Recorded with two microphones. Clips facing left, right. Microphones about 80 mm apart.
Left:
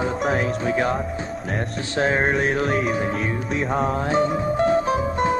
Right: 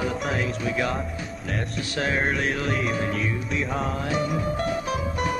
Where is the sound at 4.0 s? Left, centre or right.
Left.